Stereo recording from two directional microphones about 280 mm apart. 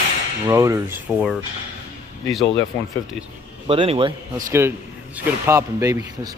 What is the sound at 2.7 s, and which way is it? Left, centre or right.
Speech, centre.